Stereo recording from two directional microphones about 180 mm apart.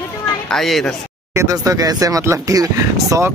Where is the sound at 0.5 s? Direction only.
Centre (ahead or behind).